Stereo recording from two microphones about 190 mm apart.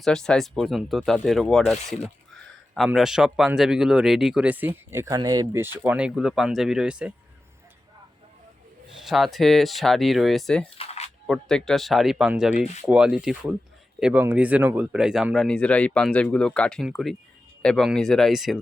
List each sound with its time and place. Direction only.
0.0 s speech: 5° left (ahead or behind)
9.0 s speech: centre (ahead or behind)
10.8 s a sound: 35° left (ahead or behind)
11.3 s speech: centre (ahead or behind)
12.5 s speech: 35° left (ahead or behind)
12.8 s speech: 5° right (ahead or behind)